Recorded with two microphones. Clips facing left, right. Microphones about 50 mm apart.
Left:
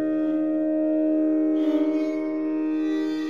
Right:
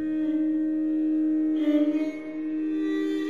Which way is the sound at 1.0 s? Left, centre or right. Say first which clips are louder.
Left 3 dB; left.